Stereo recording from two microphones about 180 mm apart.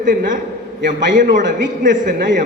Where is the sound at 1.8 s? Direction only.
45° right (ahead or behind).